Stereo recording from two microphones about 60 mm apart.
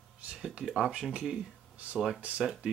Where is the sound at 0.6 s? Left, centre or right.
Centre.